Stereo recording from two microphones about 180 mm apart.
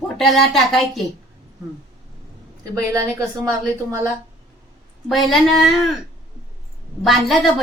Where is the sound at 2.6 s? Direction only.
15° right (ahead or behind).